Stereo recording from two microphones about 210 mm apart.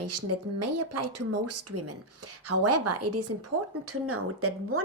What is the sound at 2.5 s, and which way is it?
Speech, 90° right.